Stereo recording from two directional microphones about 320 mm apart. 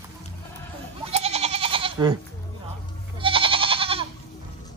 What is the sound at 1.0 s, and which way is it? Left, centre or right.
Goat, centre.